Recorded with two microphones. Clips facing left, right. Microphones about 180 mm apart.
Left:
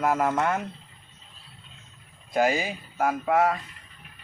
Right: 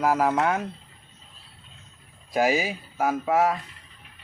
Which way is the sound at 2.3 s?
5° right (ahead or behind).